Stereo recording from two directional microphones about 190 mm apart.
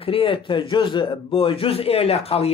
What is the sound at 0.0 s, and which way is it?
A man's voice, 30° left (ahead or behind).